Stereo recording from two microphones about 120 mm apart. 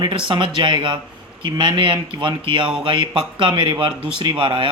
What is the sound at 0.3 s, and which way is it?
Speech, 45° right (ahead or behind).